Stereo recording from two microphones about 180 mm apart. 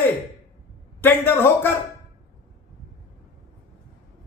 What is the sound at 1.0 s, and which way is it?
Speech, 10° left (ahead or behind).